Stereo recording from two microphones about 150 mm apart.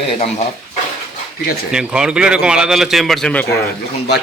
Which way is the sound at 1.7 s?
5° right (ahead or behind).